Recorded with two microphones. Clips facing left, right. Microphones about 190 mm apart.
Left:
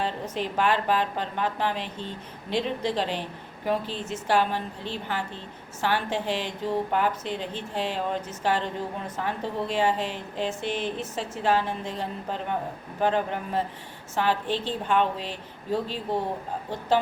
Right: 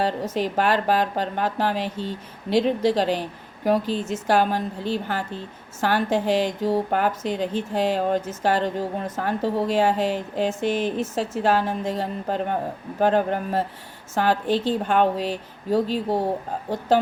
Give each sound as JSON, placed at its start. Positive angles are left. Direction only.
{"t": 0.0, "sound": "a woman's voice", "side_deg": -40}